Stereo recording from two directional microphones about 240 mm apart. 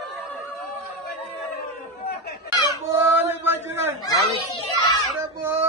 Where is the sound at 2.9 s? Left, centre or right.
Centre.